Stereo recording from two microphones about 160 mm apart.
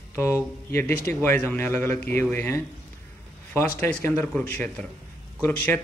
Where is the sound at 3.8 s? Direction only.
15° left (ahead or behind).